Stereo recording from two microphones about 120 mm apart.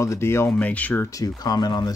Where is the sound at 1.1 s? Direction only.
30° left (ahead or behind).